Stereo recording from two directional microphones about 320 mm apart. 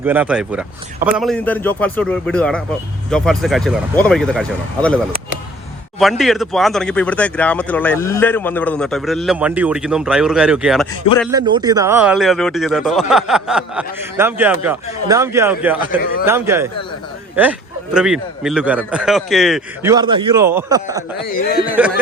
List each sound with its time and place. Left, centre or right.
0.0 s speech: centre
6.0 s speech: centre
11.3 s a man's voice: centre
19.9 s a man's voice: centre
21.2 s speech: left
21.7 s speech: centre